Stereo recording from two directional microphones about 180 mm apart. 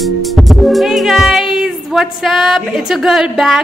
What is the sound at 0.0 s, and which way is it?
Music, centre (ahead or behind).